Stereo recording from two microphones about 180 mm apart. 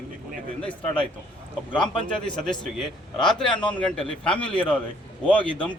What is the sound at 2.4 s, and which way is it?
A man's voice, 5° left (ahead or behind).